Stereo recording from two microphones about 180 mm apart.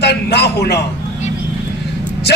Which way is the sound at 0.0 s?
65° left (ahead or behind).